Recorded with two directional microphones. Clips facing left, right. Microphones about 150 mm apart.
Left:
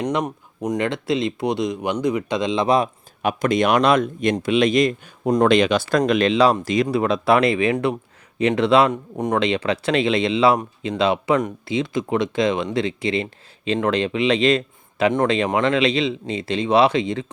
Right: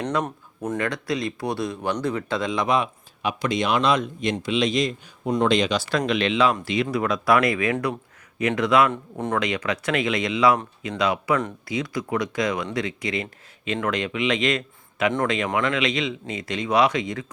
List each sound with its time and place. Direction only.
0.0 s speech: 15° left (ahead or behind)
2.6 s speech: 40° left (ahead or behind); by 6.0 s 55° left (ahead or behind)
6.0 s speech: 40° left (ahead or behind)
6.9 s speech: 25° left (ahead or behind)
8.9 s speech: 15° left (ahead or behind)
9.4 s speech: 30° left (ahead or behind)